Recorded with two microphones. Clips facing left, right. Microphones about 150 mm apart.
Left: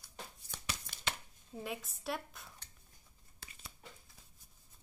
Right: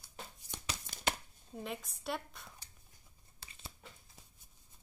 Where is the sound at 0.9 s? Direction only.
40° right (ahead or behind).